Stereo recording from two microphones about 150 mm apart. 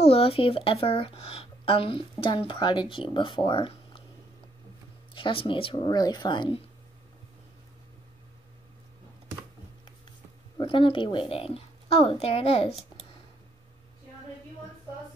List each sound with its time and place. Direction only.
0.0 s speech: 40° left (ahead or behind)
5.1 s speech: 35° left (ahead or behind)
10.6 s speech: 35° left (ahead or behind)